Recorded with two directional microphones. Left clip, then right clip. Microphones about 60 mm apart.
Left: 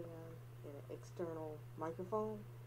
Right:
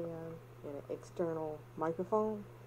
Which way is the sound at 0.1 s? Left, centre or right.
Right.